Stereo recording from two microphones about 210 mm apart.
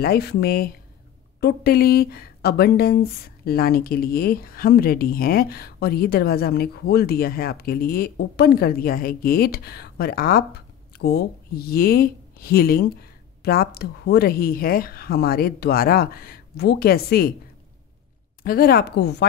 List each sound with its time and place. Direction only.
0.0 s speech: 50° left (ahead or behind)
18.4 s speech: 45° left (ahead or behind)